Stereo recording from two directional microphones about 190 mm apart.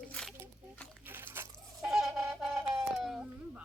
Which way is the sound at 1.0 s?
10° right (ahead or behind).